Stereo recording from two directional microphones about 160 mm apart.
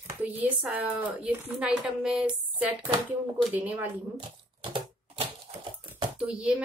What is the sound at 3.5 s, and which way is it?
Speech, 10° right (ahead or behind).